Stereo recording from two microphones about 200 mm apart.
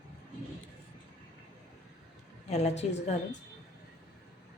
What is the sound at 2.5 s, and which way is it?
Speech, 35° left (ahead or behind).